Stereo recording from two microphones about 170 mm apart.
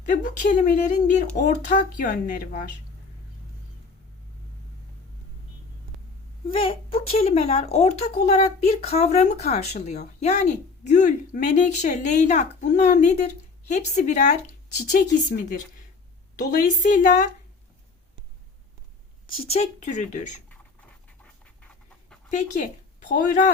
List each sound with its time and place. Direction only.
0.0 s speech: 50° left (ahead or behind)
6.5 s speech: 35° left (ahead or behind)
14.8 s a woman's voice: 55° left (ahead or behind)
19.3 s speech: 35° left (ahead or behind)
22.3 s speech: 45° left (ahead or behind)